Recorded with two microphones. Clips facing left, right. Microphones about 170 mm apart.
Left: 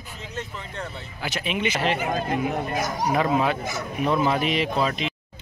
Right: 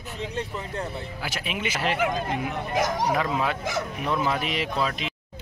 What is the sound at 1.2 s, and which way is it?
Speech, 5° right (ahead or behind).